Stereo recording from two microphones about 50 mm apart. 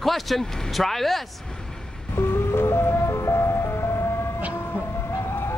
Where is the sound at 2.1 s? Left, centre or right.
Left.